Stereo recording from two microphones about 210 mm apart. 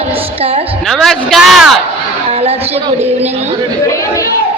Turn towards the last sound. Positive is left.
turn(degrees=-30)  # may be behind; listen again after turning